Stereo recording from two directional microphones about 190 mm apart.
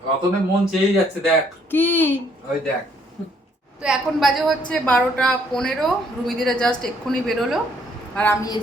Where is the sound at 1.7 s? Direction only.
10° left (ahead or behind).